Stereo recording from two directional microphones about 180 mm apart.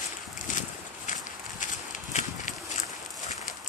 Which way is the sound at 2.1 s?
40° left (ahead or behind).